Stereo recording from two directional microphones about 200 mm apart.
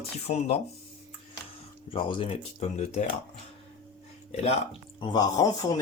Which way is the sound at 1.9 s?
25° left (ahead or behind).